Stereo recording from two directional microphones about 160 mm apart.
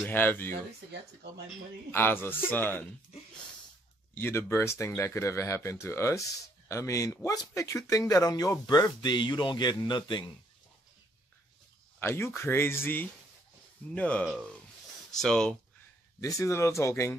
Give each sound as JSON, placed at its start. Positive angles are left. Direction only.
{"t": 0.0, "sound": "speech", "side_deg": 10}
{"t": 1.9, "sound": "speech", "side_deg": 15}
{"t": 4.1, "sound": "speech", "side_deg": 15}
{"t": 12.0, "sound": "speech", "side_deg": 15}
{"t": 16.2, "sound": "speech", "side_deg": 20}